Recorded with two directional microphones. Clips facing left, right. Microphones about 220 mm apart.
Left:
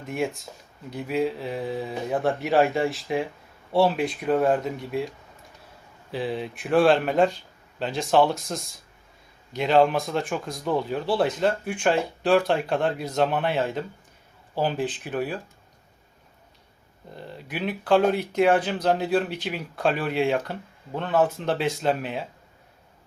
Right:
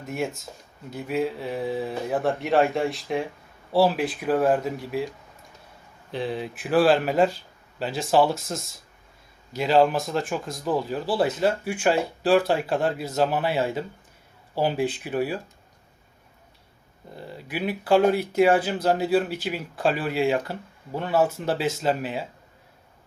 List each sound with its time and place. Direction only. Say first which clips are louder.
0.0 s speech: left 1 dB; centre (ahead or behind)
17.2 s speech: right 1 dB; 5° right (ahead or behind)